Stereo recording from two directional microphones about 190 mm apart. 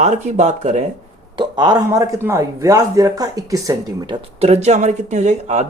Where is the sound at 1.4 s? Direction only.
20° right (ahead or behind).